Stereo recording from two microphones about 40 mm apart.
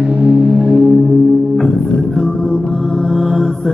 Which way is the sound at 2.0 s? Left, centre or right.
Centre.